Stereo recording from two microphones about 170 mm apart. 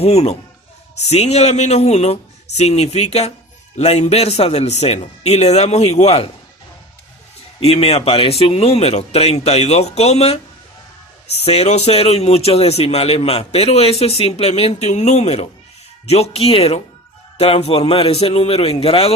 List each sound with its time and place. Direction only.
0.0 s speech: 40° left (ahead or behind)
7.6 s speech: 35° left (ahead or behind)